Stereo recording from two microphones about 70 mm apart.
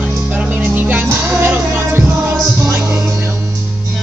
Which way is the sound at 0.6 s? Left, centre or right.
Right.